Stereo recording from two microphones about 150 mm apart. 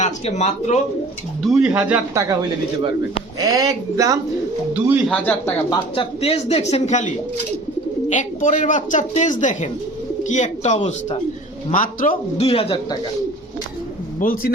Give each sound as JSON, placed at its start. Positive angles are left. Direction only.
{"t": 0.0, "sound": "speech", "side_deg": 50}
{"t": 1.5, "sound": "speech", "side_deg": -5}
{"t": 2.1, "sound": "speech", "side_deg": -25}
{"t": 5.0, "sound": "speech", "side_deg": 5}
{"t": 6.0, "sound": "speech", "side_deg": 40}
{"t": 8.1, "sound": "speech", "side_deg": 55}
{"t": 11.7, "sound": "speech", "side_deg": 65}
{"t": 12.4, "sound": "a man's voice", "side_deg": 40}
{"t": 14.2, "sound": "speech", "side_deg": 70}